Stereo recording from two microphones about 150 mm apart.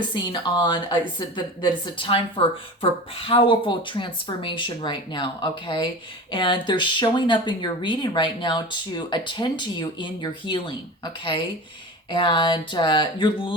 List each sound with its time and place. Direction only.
0.1 s speech: 30° left (ahead or behind)